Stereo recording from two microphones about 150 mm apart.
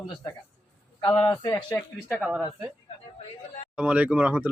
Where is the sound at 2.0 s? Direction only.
5° right (ahead or behind).